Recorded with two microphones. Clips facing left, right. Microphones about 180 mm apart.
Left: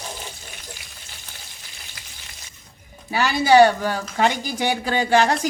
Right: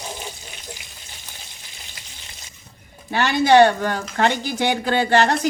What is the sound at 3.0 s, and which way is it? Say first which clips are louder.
Speech: right 1 dB; 5° left (ahead or behind).